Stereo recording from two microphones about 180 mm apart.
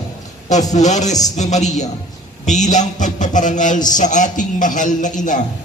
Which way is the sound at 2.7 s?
45° left (ahead or behind).